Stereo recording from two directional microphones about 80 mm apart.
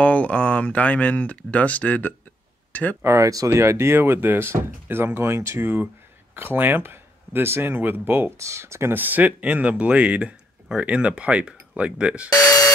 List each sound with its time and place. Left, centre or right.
0.0 s speech: centre
3.0 s speech: right
6.3 s speech: right
8.4 s speech: right; by 12.3 s centre
12.3 s a sound: left